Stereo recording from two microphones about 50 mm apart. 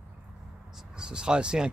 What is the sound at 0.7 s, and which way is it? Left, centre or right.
Speech, centre.